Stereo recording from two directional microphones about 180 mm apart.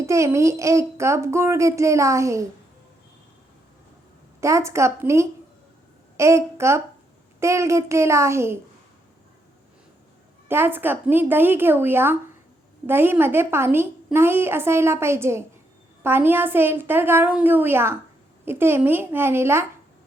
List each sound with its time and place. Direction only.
0.0 s a woman's voice: 15° right (ahead or behind)
4.4 s a woman's voice: 15° right (ahead or behind)
10.5 s a woman's voice: 10° right (ahead or behind)